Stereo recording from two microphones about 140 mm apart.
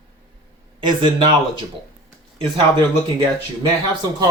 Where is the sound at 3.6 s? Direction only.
30° right (ahead or behind).